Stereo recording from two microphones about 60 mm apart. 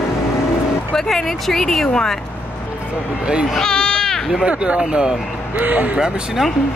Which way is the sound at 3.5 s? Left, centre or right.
Centre.